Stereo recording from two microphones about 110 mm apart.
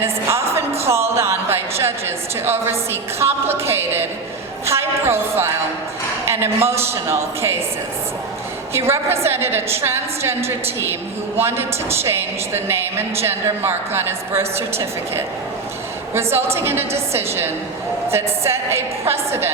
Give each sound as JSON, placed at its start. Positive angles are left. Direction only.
{"t": 0.0, "sound": "a woman's voice", "side_deg": -25}
{"t": 8.9, "sound": "a woman's voice", "side_deg": -25}
{"t": 16.6, "sound": "a woman's voice", "side_deg": -20}